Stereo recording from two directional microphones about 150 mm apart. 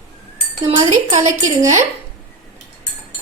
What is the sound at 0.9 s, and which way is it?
Speech, 50° right (ahead or behind).